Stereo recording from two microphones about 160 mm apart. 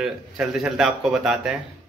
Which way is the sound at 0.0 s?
5° right (ahead or behind).